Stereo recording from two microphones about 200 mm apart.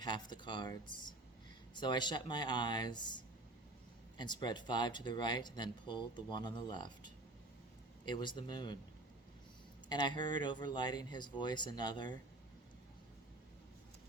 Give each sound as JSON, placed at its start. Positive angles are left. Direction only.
{"t": 0.0, "sound": "speech", "side_deg": 20}
{"t": 4.2, "sound": "speech", "side_deg": 20}
{"t": 9.9, "sound": "speech", "side_deg": 20}